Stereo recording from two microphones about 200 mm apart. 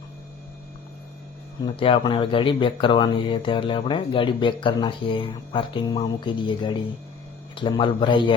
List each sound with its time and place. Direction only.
1.6 s speech: 25° left (ahead or behind)